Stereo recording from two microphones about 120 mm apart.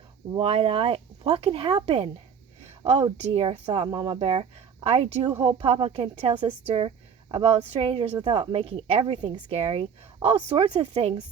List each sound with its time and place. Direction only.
0.3 s a woman's voice: 50° right (ahead or behind)
3.0 s a woman's voice: 50° right (ahead or behind)
3.7 s speech: 40° right (ahead or behind)
4.2 s a woman's voice: 55° right (ahead or behind)
9.6 s a woman's voice: 55° right (ahead or behind)